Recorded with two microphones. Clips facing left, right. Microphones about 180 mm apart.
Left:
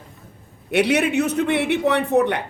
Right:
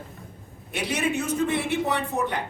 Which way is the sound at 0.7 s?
70° left (ahead or behind).